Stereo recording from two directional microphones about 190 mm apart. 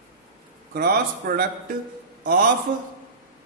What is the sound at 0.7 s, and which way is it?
Speech, 50° right (ahead or behind).